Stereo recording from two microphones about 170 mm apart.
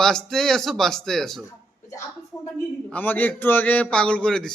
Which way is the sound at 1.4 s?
15° left (ahead or behind).